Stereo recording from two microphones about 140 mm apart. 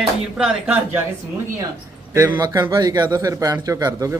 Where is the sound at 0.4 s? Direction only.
10° right (ahead or behind).